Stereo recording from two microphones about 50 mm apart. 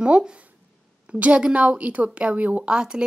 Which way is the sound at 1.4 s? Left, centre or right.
Right.